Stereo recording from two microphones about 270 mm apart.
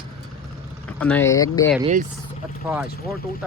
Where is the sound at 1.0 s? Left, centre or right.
Centre.